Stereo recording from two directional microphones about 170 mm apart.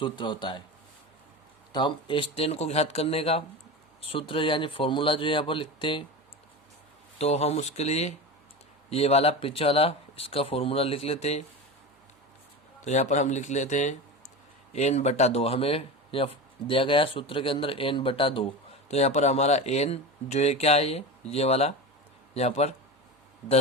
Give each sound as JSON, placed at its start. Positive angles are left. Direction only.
{"t": 0.0, "sound": "speech", "side_deg": 25}
{"t": 1.7, "sound": "speech", "side_deg": 30}
{"t": 7.2, "sound": "speech", "side_deg": 40}
{"t": 12.8, "sound": "speech", "side_deg": 45}